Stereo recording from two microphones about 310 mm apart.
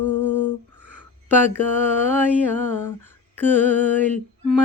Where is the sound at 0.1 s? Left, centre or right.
Right.